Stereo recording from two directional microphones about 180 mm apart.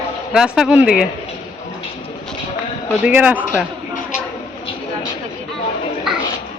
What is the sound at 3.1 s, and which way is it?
Speech, 5° right (ahead or behind).